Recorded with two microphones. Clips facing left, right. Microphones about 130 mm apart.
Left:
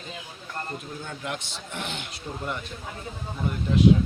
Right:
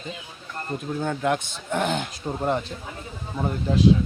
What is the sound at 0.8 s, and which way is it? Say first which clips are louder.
Speech: right 10 dB; 65° right (ahead or behind).